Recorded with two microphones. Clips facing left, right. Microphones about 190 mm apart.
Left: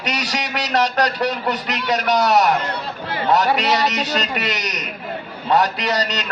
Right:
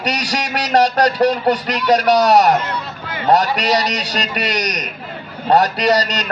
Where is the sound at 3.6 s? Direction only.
40° right (ahead or behind).